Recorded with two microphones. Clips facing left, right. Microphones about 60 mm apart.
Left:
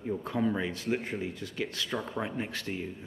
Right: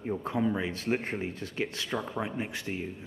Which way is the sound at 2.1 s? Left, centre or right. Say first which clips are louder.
Even; centre.